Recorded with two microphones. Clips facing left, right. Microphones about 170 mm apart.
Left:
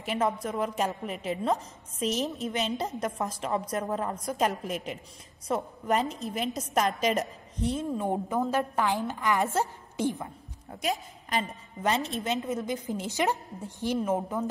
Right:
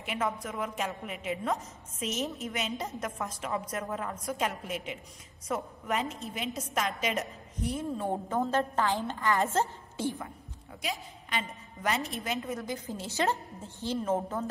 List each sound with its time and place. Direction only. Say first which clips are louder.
0.0 s a woman's voice: left 4 dB; 35° left (ahead or behind)
8.0 s a woman's voice: left 1 dB; 15° left (ahead or behind)
10.7 s a woman's voice: left 6 dB; 45° left (ahead or behind)
11.8 s a woman's voice: left 4 dB; 25° left (ahead or behind)